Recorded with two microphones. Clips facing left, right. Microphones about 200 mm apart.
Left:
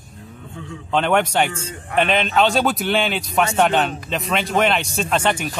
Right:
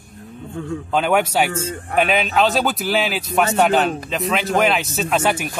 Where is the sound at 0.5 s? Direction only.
50° right (ahead or behind).